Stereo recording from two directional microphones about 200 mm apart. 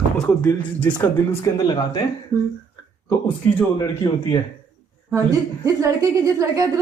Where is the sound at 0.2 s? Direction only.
10° left (ahead or behind).